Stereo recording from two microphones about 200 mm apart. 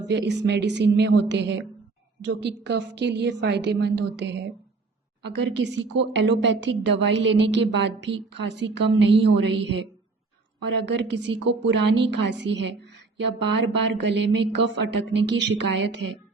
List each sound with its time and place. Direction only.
0.1 s a woman's voice: 60° right (ahead or behind)
10.8 s a woman's voice: 60° right (ahead or behind)